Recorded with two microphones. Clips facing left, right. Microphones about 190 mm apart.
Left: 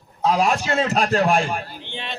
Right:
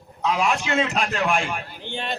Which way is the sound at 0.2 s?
35° left (ahead or behind).